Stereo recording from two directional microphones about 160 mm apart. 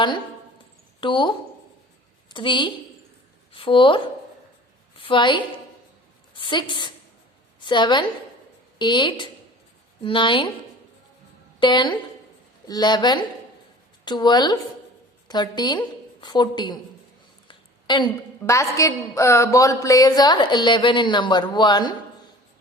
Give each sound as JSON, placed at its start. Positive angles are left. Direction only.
{"t": 1.0, "sound": "a woman's voice", "side_deg": 30}
{"t": 11.6, "sound": "a woman's voice", "side_deg": 30}